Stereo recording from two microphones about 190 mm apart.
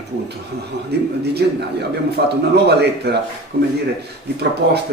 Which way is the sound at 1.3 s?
60° right (ahead or behind).